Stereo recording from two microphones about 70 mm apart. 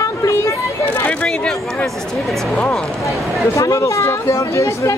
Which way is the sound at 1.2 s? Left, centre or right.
Centre.